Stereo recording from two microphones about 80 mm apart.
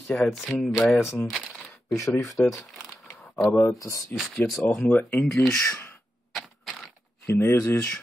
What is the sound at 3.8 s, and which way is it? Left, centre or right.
Speech, left.